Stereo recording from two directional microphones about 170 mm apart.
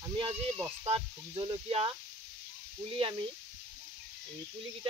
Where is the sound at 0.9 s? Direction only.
30° right (ahead or behind).